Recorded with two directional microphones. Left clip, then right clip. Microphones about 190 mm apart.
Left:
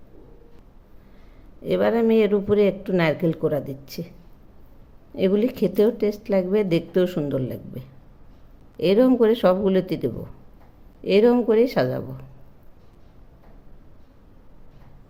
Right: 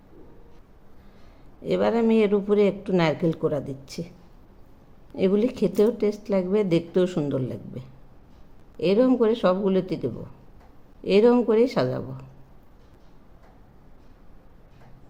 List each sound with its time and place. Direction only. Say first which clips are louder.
1.6 s speech: left 2 dB; 5° left (ahead or behind)
5.1 s speech: left 1 dB; 5° left (ahead or behind)